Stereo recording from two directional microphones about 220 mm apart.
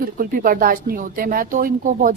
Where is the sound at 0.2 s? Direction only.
40° right (ahead or behind).